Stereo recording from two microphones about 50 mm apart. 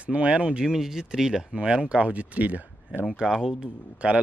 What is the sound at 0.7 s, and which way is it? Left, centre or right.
Speech, centre.